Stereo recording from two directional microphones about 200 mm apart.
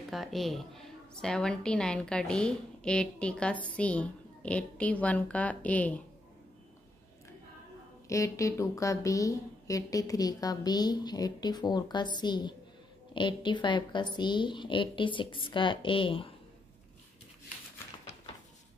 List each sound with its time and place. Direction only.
0.1 s a woman's voice: centre (ahead or behind)
8.1 s a woman's voice: 15° left (ahead or behind)